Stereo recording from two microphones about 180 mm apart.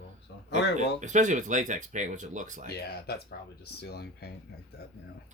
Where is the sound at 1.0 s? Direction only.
45° right (ahead or behind).